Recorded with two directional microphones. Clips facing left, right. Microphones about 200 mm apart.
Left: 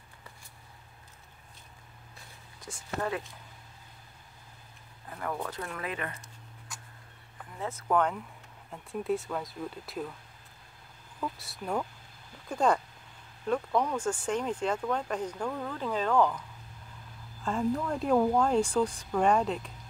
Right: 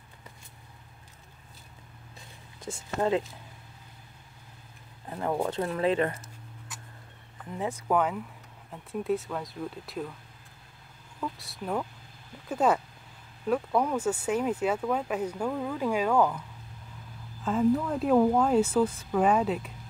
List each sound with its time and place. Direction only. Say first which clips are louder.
2.6 s speech: right 5 dB; 25° right (ahead or behind)
5.1 s speech: right 7 dB; 25° right (ahead or behind)
7.5 s speech: right 2 dB; 15° right (ahead or behind)
11.1 s speech: right 1 dB; centre (ahead or behind)